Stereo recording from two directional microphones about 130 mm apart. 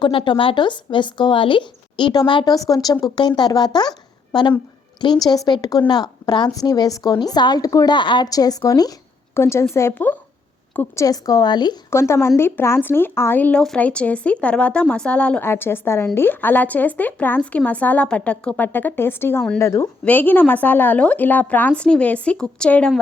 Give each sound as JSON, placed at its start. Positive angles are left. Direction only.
{"t": 0.0, "sound": "a woman's voice", "side_deg": 40}
{"t": 10.8, "sound": "a woman's voice", "side_deg": 25}
{"t": 11.9, "sound": "a woman's voice", "side_deg": 20}